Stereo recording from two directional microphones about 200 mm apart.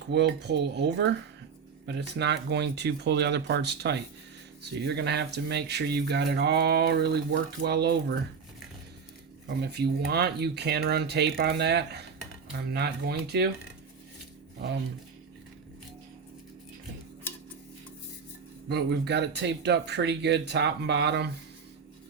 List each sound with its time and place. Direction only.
0.1 s speech: 55° right (ahead or behind)
9.5 s speech: 55° right (ahead or behind)
17.3 s tick-tock: 10° left (ahead or behind)
18.7 s speech: 55° right (ahead or behind)